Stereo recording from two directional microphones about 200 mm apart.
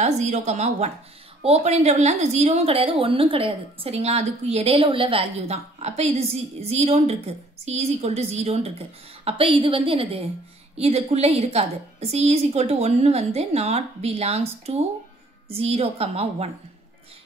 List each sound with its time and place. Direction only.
0.0 s a woman's voice: 35° right (ahead or behind)